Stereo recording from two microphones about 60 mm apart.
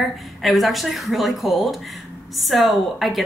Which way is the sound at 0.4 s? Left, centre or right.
Centre.